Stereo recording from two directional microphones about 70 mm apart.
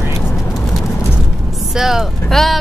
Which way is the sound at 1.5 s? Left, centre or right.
Centre.